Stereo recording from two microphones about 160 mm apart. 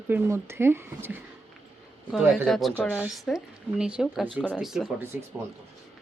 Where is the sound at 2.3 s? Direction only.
Centre (ahead or behind).